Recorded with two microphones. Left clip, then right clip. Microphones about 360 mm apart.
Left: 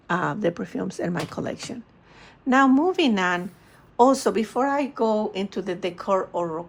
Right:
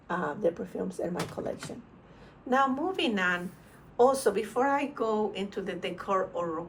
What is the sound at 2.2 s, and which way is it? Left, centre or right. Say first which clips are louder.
A woman's voice: left 7 dB; centre.